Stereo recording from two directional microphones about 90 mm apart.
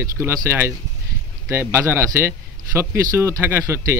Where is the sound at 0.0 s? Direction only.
25° right (ahead or behind).